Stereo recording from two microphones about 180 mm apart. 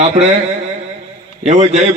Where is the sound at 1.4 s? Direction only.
40° right (ahead or behind).